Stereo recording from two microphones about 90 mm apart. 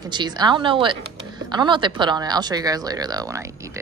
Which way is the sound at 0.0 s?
55° right (ahead or behind).